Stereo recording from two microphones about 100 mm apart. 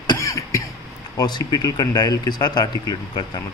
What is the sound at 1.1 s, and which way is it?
Speech, 45° left (ahead or behind).